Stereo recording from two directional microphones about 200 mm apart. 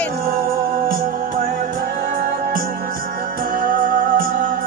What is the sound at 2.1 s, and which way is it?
Music, 45° right (ahead or behind).